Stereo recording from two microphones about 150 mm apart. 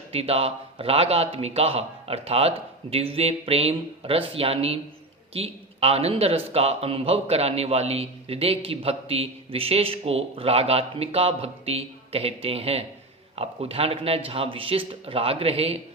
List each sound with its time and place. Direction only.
0.1 s speech: 40° right (ahead or behind)